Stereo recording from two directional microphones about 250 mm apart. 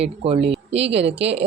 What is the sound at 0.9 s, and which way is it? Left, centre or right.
Speech, right.